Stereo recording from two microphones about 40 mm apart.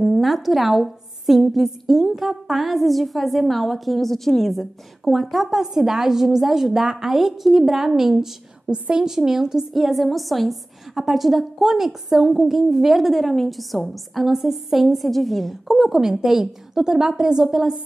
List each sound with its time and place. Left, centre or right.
0.0 s a woman's voice: centre
8.6 s a woman's voice: right
8.9 s a woman's voice: centre
9.9 s a woman's voice: centre